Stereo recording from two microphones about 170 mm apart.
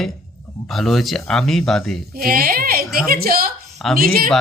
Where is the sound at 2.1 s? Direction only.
60° right (ahead or behind).